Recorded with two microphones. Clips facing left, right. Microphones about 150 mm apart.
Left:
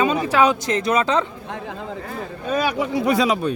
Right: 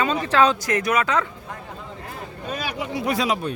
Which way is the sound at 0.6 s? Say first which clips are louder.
Left 2 dB; 25° left (ahead or behind).